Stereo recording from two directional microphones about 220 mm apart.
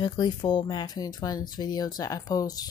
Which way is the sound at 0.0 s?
20° left (ahead or behind).